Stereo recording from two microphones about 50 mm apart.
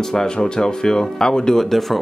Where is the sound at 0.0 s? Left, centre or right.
Centre.